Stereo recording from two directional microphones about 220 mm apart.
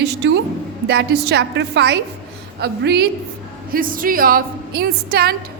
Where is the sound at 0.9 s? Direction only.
50° right (ahead or behind).